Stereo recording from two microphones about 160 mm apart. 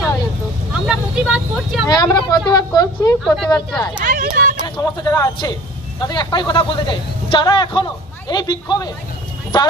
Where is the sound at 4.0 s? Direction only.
60° right (ahead or behind).